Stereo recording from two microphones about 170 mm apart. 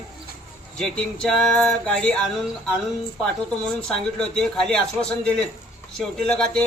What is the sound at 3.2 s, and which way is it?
A man's voice, 5° left (ahead or behind).